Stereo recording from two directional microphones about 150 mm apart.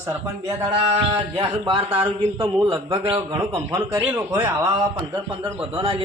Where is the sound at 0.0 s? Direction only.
15° right (ahead or behind).